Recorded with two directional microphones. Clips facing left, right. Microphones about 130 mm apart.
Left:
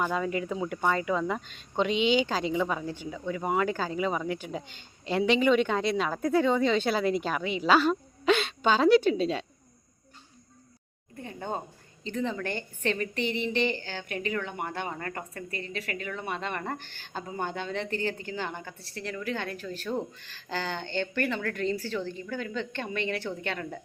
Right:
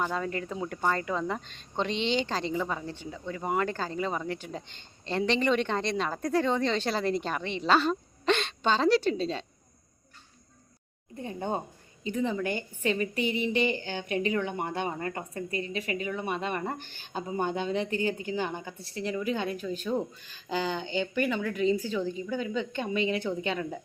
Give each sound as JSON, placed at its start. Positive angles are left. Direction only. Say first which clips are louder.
{"t": 0.0, "sound": "speech", "louder": "left 2 dB", "side_deg": 5}
{"t": 11.2, "sound": "a woman's voice", "louder": "right 3 dB", "side_deg": -20}